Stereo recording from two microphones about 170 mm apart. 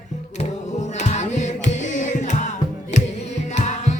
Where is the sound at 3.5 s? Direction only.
45° left (ahead or behind).